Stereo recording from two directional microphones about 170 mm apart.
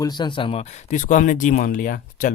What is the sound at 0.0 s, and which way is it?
Speech, 25° left (ahead or behind).